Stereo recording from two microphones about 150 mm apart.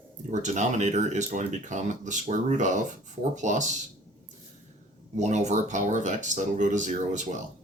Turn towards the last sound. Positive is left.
turn(degrees=-55)  # may be behind; listen again after turning